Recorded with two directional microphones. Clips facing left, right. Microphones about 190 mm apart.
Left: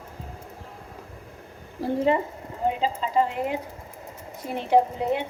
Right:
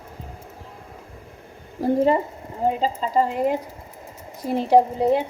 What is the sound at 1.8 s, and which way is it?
A woman's voice, 45° right (ahead or behind).